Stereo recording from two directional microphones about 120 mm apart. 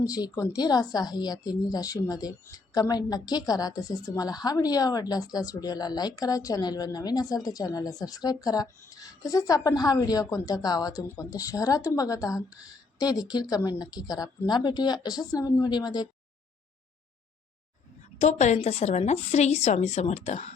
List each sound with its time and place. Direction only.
0.0 s a woman's voice: 30° left (ahead or behind)
18.2 s a woman's voice: 70° left (ahead or behind)